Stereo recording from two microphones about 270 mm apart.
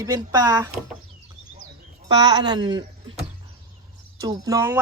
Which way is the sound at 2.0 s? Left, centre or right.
Centre.